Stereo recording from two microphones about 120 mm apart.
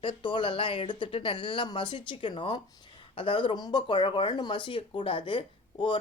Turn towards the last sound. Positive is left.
turn(degrees=45)  # may be behind; listen again after turning